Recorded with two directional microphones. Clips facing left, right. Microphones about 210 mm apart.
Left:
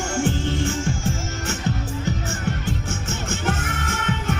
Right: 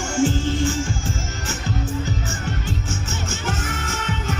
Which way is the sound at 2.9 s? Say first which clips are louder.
Left 1 dB; 60° left (ahead or behind).